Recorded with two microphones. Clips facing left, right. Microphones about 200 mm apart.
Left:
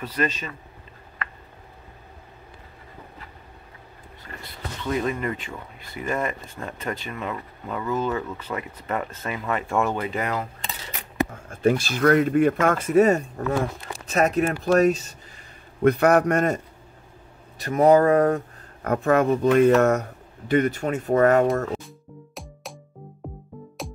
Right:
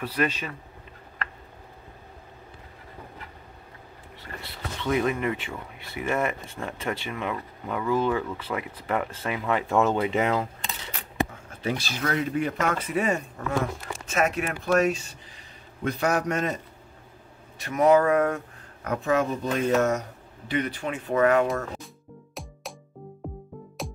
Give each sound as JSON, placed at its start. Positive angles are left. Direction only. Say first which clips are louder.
{"t": 0.0, "sound": "speech", "louder": "even", "side_deg": -10}
{"t": 4.8, "sound": "speech", "louder": "right 1 dB", "side_deg": -10}
{"t": 9.7, "sound": "speech", "louder": "right 2 dB", "side_deg": -20}
{"t": 11.4, "sound": "speech", "louder": "left 9 dB", "side_deg": 50}
{"t": 15.8, "sound": "a man's voice", "louder": "left 8 dB", "side_deg": 60}
{"t": 17.6, "sound": "speech", "louder": "left 3 dB", "side_deg": 35}
{"t": 18.9, "sound": "speech", "louder": "left 5 dB", "side_deg": 55}
{"t": 22.3, "sound": "music", "louder": "right 1 dB", "side_deg": 0}